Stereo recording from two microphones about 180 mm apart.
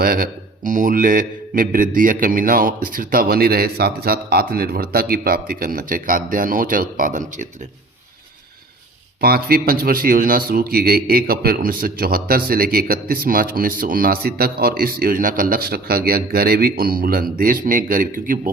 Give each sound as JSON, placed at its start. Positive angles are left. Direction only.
{"t": 0.0, "sound": "a man's voice", "side_deg": -55}
{"t": 9.2, "sound": "a man's voice", "side_deg": -55}